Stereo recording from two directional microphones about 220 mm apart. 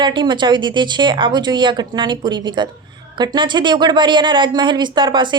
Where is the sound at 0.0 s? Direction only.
20° right (ahead or behind).